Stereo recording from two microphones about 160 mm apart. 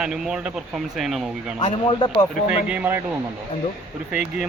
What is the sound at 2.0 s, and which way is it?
Speech, 30° left (ahead or behind).